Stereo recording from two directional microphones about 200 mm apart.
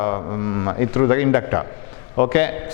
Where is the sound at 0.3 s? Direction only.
20° left (ahead or behind).